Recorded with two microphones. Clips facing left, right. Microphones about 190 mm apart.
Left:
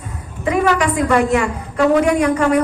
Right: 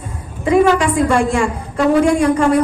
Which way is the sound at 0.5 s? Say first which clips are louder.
Right 4 dB; 30° right (ahead or behind).